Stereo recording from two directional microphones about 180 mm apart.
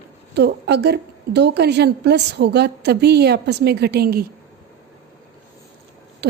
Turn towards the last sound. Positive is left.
turn(degrees=-65)  # may be behind; listen again after turning